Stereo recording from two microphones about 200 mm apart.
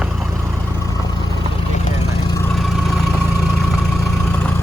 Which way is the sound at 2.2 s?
15° left (ahead or behind).